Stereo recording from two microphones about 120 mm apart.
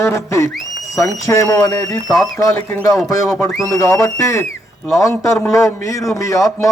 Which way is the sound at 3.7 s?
25° left (ahead or behind).